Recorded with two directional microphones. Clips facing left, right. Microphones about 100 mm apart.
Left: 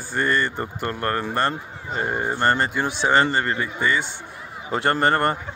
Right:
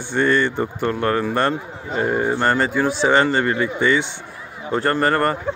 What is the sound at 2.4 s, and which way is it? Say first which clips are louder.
Speech: even; 10° left (ahead or behind).